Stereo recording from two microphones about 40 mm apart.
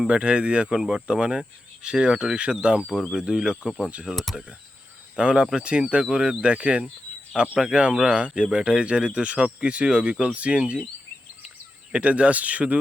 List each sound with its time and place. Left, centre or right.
0.1 s speech: right
3.7 s speech: centre
5.1 s speech: right
11.9 s speech: right